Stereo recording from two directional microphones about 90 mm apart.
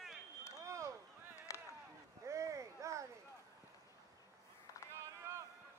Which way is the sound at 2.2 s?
35° right (ahead or behind).